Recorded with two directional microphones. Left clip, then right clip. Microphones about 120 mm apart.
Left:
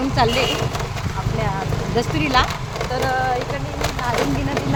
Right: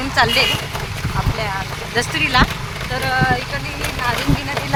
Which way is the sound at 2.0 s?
20° right (ahead or behind).